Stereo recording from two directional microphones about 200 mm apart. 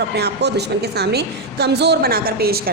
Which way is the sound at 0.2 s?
55° right (ahead or behind).